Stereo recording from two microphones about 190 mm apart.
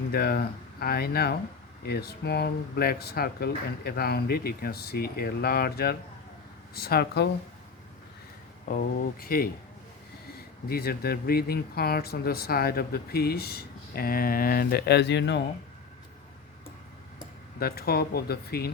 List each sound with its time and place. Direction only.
0.1 s speech: 55° left (ahead or behind)
8.6 s speech: 50° left (ahead or behind); by 15.4 s 65° left (ahead or behind)
17.6 s speech: 55° left (ahead or behind)